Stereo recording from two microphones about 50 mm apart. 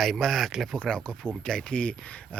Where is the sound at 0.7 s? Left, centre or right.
Centre.